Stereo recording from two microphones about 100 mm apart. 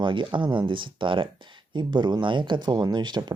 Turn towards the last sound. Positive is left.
turn(degrees=-45)  # may be behind; listen again after turning